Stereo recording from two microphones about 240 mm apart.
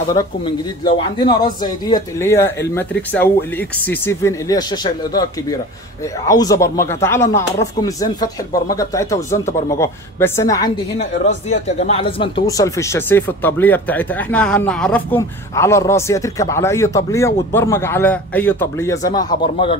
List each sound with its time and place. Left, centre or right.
0.2 s speech: centre
11.0 s speech: left